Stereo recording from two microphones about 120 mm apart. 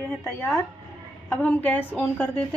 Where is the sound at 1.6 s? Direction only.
15° left (ahead or behind).